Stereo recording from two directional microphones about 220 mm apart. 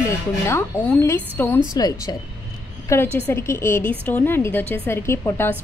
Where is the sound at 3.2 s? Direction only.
10° left (ahead or behind).